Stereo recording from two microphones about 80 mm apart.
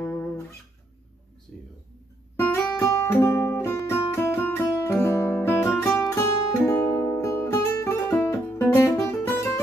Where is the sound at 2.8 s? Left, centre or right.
Left.